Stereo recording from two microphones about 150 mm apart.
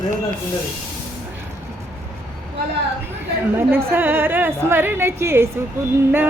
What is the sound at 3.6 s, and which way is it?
Speech, 15° right (ahead or behind).